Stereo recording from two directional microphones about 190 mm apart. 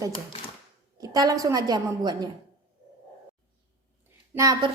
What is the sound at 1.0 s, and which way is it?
A woman's voice, 20° right (ahead or behind).